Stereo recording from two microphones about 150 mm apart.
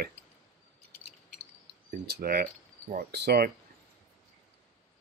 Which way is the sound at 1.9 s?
85° right.